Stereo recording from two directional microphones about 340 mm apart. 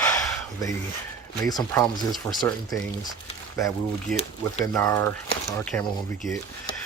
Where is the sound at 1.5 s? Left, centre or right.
Centre.